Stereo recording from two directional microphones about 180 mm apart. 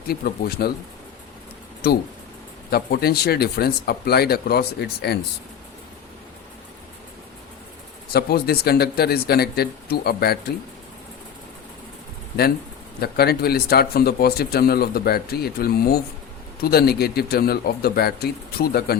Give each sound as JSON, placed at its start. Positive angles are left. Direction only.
{"t": 0.1, "sound": "speech", "side_deg": 60}
{"t": 1.8, "sound": "speech", "side_deg": 60}
{"t": 8.1, "sound": "speech", "side_deg": 60}
{"t": 13.0, "sound": "speech", "side_deg": 60}